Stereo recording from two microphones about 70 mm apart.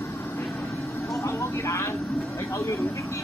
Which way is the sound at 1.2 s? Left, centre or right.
Left.